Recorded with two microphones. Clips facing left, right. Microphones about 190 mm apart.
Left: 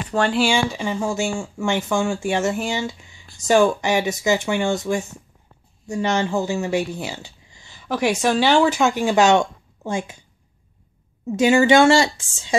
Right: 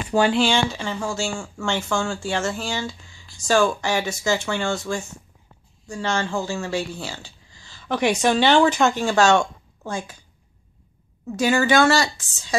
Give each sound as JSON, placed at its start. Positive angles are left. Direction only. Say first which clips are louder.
{"t": 0.1, "sound": "speech", "louder": "right 2 dB", "side_deg": -5}
{"t": 0.4, "sound": "speech", "louder": "left 1 dB", "side_deg": 10}
{"t": 7.9, "sound": "speech", "louder": "even", "side_deg": 5}
{"t": 11.2, "sound": "speech", "louder": "left 5 dB", "side_deg": 20}